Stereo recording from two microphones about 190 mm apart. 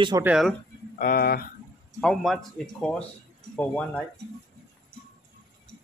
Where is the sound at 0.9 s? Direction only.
50° left (ahead or behind).